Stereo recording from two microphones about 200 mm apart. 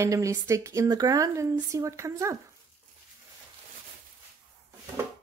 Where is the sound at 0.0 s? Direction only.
15° right (ahead or behind).